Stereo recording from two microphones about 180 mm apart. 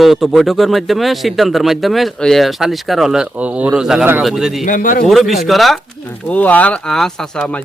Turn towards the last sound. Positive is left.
turn(degrees=5)  # may be behind; listen again after turning